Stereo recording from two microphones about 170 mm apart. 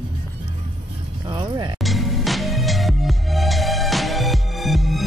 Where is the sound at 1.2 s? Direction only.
25° right (ahead or behind).